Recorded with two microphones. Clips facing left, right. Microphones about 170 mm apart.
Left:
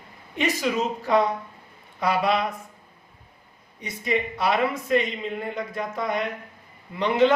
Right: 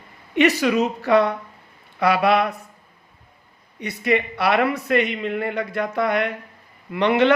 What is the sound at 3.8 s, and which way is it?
Speech, 70° right (ahead or behind).